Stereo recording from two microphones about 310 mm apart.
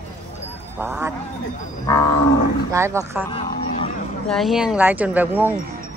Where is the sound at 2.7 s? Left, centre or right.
Centre.